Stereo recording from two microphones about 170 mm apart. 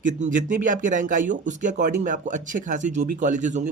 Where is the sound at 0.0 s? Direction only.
45° right (ahead or behind).